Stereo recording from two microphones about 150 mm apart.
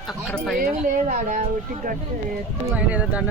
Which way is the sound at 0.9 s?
60° right (ahead or behind).